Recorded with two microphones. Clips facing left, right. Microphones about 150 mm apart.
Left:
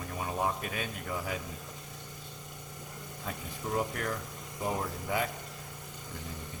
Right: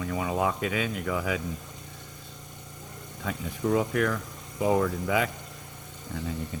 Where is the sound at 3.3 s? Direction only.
90° right.